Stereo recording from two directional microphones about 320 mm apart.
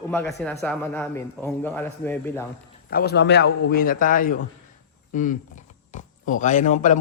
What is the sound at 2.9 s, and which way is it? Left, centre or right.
A man's voice, left.